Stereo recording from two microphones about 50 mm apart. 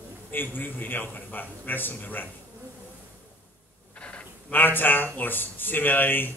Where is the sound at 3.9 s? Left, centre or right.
Left.